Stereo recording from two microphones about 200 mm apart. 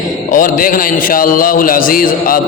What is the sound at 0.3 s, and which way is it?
A man's voice, 40° left (ahead or behind).